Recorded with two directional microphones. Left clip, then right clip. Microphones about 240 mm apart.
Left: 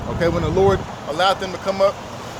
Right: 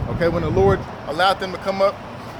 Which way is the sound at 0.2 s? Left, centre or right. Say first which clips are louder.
Even; centre.